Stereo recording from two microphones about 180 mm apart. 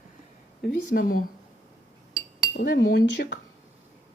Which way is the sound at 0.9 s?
50° left (ahead or behind).